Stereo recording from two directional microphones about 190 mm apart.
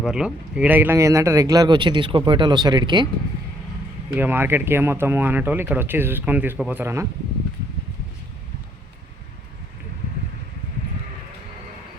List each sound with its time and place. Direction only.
0.0 s speech: 5° right (ahead or behind); by 3.1 s 25° right (ahead or behind)
4.1 s speech: 10° right (ahead or behind)